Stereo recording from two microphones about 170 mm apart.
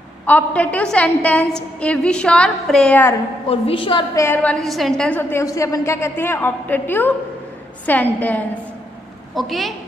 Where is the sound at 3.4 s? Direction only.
35° left (ahead or behind).